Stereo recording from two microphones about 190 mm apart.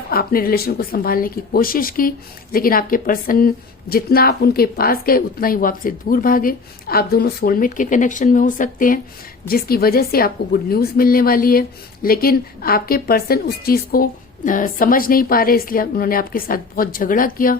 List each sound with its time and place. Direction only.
0.1 s speech: 50° left (ahead or behind)